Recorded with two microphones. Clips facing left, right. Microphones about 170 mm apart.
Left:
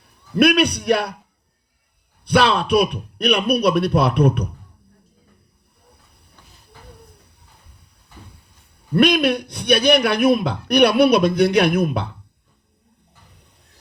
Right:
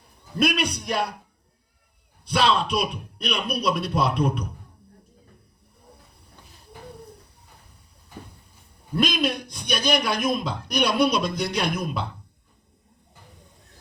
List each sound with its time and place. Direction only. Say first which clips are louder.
0.3 s a man's voice: left 8 dB; 65° left (ahead or behind)
2.2 s a man's voice: left 5 dB; 65° left (ahead or behind)
8.9 s a man's voice: left 8 dB; 65° left (ahead or behind)